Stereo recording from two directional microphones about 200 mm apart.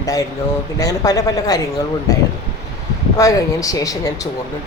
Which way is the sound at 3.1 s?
15° left (ahead or behind).